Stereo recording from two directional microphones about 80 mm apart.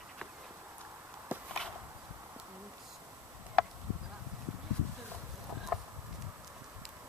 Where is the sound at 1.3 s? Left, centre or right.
Right.